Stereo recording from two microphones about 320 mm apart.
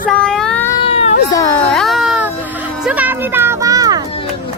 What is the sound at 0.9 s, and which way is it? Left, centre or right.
Cat, centre.